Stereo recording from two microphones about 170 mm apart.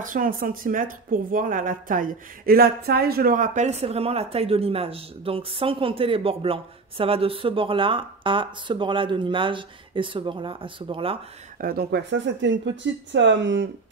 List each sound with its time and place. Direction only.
0.0 s speech: 55° right (ahead or behind); by 11.1 s 30° right (ahead or behind)
11.6 s speech: 65° right (ahead or behind); by 13.7 s 90° right